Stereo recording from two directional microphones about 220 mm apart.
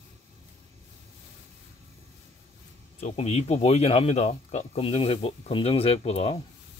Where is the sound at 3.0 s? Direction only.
30° left (ahead or behind).